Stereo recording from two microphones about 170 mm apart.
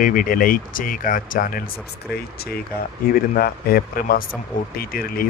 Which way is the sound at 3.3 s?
60° left (ahead or behind).